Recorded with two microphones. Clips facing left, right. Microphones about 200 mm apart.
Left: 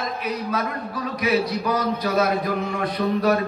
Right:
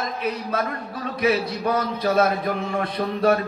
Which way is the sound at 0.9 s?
25° right (ahead or behind).